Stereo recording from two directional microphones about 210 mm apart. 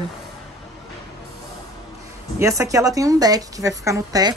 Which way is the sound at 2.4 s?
15° right (ahead or behind).